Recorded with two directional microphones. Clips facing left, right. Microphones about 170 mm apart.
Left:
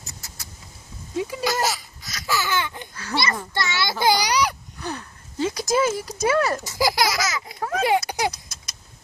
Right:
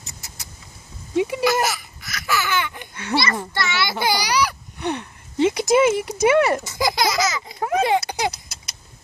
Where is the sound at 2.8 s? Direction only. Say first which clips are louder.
Right 5 dB; 25° right (ahead or behind).